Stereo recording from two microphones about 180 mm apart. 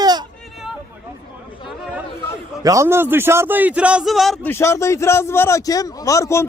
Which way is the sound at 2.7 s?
15° right (ahead or behind).